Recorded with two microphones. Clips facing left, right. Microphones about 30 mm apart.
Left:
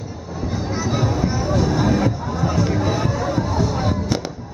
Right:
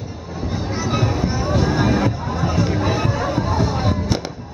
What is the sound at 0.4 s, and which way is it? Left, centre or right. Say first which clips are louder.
Music: even; centre.